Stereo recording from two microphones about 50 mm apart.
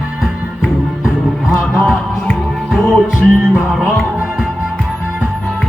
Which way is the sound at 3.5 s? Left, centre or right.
Centre.